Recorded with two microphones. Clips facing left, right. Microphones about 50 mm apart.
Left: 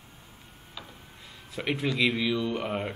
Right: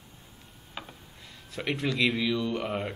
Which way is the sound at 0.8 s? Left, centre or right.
Right.